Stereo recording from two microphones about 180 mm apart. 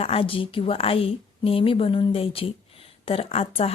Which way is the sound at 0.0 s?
30° left (ahead or behind).